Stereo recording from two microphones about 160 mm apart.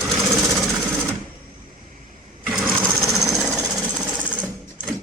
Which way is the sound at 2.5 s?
Centre (ahead or behind).